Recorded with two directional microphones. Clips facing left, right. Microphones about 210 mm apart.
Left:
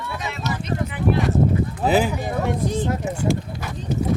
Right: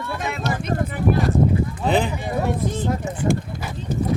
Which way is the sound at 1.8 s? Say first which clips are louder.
Left 2 dB; 5° left (ahead or behind).